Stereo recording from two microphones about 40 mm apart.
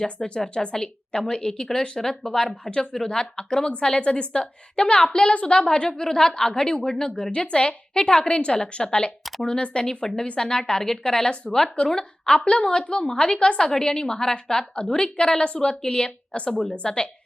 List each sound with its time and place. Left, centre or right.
0.3 s a woman's voice: centre
5.3 s a woman's voice: left
5.5 s a woman's voice: left